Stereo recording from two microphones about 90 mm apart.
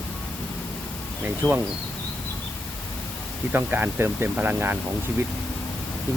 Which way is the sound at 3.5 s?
20° right (ahead or behind).